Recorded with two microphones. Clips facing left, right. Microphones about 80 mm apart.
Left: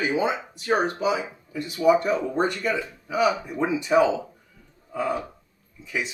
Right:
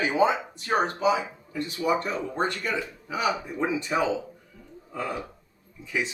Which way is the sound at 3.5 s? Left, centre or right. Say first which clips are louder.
Left 3 dB; centre.